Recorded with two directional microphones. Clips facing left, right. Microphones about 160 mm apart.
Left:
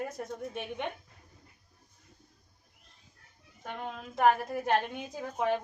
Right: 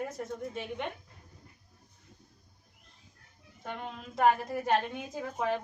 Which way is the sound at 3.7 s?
5° left (ahead or behind).